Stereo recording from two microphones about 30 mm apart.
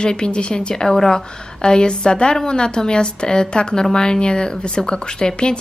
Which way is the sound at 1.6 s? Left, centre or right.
Left.